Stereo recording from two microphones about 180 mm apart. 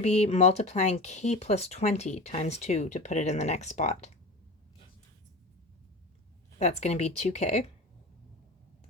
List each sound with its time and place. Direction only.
0.0 s speech: 35° left (ahead or behind)
6.6 s speech: 40° left (ahead or behind)